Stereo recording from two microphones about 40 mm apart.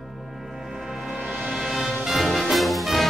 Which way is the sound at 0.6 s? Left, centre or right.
Centre.